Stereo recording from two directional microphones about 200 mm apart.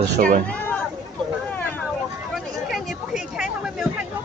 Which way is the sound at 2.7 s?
Centre (ahead or behind).